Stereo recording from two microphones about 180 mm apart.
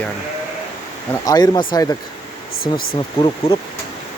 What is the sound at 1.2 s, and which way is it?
Speech, 20° left (ahead or behind).